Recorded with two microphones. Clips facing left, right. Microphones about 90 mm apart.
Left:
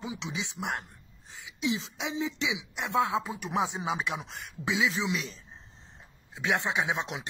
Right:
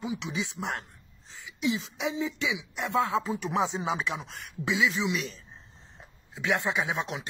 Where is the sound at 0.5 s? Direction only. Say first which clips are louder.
Even; 15° left (ahead or behind).